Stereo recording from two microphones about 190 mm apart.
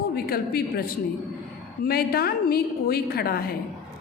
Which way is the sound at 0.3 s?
50° left (ahead or behind).